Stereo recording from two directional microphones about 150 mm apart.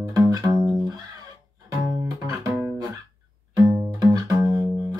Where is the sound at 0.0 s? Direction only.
25° right (ahead or behind).